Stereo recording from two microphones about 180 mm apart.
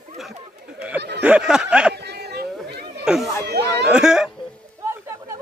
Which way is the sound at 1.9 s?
65° right (ahead or behind).